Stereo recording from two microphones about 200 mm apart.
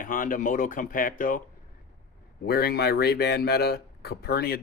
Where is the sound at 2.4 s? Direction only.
50° left (ahead or behind).